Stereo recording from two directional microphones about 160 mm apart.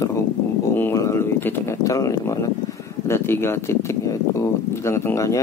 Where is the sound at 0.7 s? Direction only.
15° left (ahead or behind).